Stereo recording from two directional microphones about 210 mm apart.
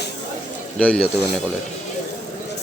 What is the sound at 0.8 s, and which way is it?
Speech, 5° left (ahead or behind).